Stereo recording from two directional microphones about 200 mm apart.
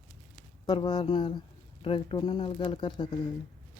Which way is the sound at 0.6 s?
25° left (ahead or behind).